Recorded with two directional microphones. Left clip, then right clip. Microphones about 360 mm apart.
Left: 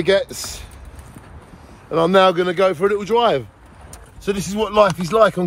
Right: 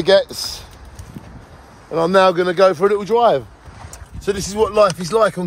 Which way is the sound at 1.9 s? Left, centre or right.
Centre.